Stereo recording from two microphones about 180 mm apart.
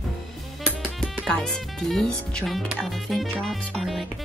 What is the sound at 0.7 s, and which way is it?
Speech, centre (ahead or behind).